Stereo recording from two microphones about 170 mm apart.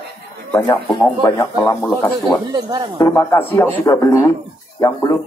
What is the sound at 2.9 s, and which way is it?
A man's voice, 15° left (ahead or behind).